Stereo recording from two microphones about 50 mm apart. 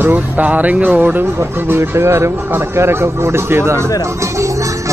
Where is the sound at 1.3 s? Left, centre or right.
Right.